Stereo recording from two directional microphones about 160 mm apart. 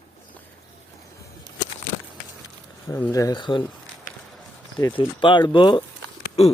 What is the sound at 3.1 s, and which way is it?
Speech, 25° left (ahead or behind).